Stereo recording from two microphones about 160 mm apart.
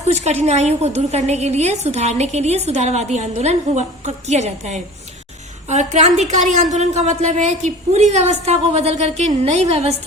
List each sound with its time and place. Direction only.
0.4 s a woman's voice: 45° right (ahead or behind)